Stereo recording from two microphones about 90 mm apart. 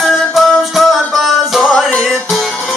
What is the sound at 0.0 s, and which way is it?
Music, centre (ahead or behind).